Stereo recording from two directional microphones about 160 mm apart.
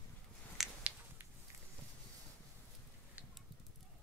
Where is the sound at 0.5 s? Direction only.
Centre (ahead or behind).